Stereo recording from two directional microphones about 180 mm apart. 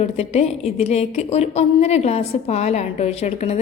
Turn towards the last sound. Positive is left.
turn(degrees=35)  # may be behind; listen again after turning